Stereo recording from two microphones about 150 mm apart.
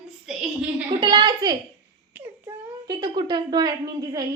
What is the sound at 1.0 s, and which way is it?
Speech, 30° right (ahead or behind).